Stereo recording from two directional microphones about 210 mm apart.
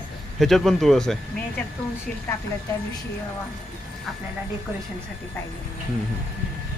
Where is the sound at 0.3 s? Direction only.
Centre (ahead or behind).